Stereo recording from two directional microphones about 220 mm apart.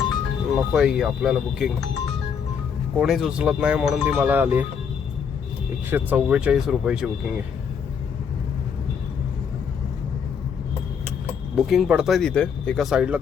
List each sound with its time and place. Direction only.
0.5 s speech: centre (ahead or behind)
3.0 s speech: centre (ahead or behind)
5.9 s speech: 10° right (ahead or behind)
11.5 s speech: centre (ahead or behind)